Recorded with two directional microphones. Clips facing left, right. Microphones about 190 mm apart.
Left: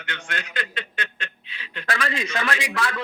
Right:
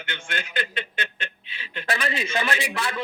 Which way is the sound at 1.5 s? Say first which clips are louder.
Even; 25° right (ahead or behind).